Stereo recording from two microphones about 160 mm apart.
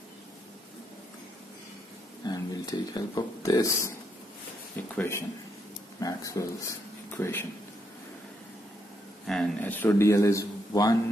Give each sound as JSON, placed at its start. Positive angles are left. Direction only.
{"t": 2.2, "sound": "speech", "side_deg": 25}
{"t": 4.9, "sound": "a man's voice", "side_deg": 15}
{"t": 9.3, "sound": "a man's voice", "side_deg": 10}